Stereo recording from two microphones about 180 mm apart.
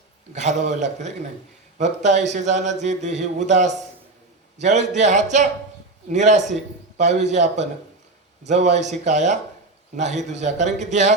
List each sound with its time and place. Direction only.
0.3 s speech: 40° right (ahead or behind)